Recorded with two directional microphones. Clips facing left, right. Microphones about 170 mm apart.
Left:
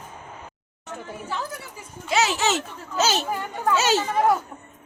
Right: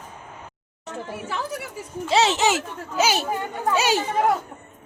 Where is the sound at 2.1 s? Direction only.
30° right (ahead or behind).